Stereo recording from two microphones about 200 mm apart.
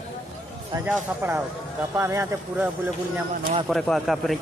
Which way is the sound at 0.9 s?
10° right (ahead or behind).